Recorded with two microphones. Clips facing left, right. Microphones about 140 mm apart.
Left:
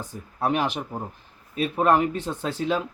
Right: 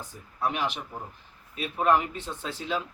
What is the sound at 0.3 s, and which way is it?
A man's voice, 45° left (ahead or behind).